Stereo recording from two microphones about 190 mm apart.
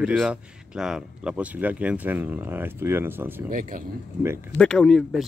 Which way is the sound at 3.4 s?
45° right (ahead or behind).